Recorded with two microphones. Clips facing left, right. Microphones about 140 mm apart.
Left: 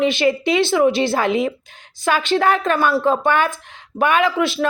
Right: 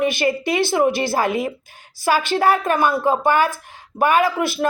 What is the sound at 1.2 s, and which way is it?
Speech, 50° right (ahead or behind).